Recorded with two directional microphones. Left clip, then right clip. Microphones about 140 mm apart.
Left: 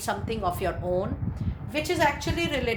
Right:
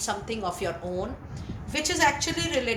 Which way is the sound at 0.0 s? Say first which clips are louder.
Left 2 dB; 60° left (ahead or behind).